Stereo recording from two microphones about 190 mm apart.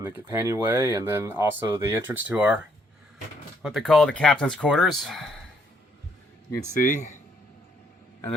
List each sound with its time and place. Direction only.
0.3 s speech: 15° right (ahead or behind)
3.6 s speech: centre (ahead or behind)
6.8 s speech: 40° left (ahead or behind)